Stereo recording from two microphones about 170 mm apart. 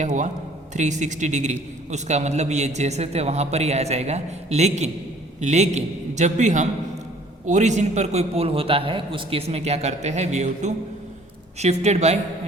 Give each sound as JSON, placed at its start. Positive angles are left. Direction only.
{"t": 0.0, "sound": "a man's voice", "side_deg": -45}